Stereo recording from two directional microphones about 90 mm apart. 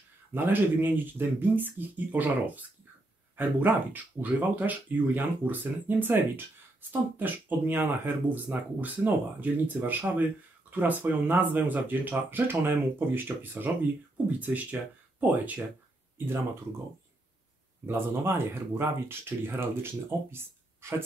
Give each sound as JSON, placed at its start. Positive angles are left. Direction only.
{"t": 0.3, "sound": "speech", "side_deg": -20}
{"t": 17.8, "sound": "speech", "side_deg": -25}